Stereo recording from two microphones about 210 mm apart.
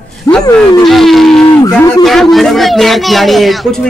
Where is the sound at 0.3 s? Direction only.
15° left (ahead or behind).